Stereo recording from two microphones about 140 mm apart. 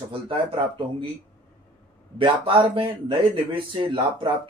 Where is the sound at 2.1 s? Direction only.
40° right (ahead or behind).